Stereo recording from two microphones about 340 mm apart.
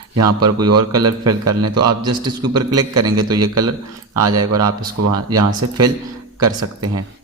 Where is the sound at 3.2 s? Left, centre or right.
Centre.